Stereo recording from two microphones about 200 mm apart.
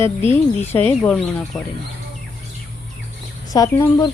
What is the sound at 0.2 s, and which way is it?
Speech, 35° left (ahead or behind).